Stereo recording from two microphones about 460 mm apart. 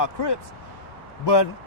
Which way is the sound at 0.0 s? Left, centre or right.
Left.